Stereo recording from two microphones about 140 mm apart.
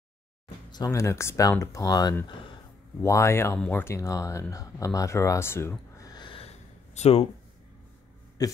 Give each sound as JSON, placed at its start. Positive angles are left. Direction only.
{"t": 0.7, "sound": "speech", "side_deg": 25}